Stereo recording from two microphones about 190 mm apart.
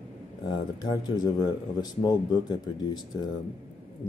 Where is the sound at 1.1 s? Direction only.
20° left (ahead or behind).